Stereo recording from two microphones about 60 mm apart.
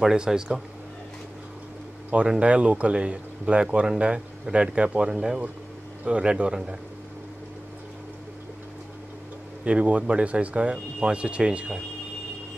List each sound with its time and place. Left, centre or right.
0.0 s speech: centre
2.2 s speech: centre
9.7 s speech: right